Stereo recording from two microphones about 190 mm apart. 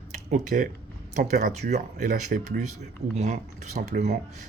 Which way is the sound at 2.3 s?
50° right (ahead or behind).